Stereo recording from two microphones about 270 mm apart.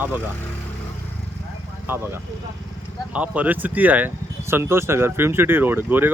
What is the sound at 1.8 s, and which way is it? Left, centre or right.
Speech, centre.